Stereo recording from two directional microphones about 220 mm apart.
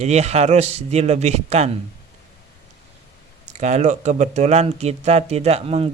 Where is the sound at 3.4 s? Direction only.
30° right (ahead or behind).